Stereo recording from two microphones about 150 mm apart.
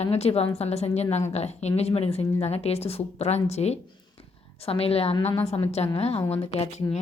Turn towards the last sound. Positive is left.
turn(degrees=40)  # may be behind; listen again after turning